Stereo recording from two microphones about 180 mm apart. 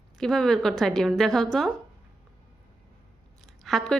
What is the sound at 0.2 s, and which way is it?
A woman's voice, 5° left (ahead or behind).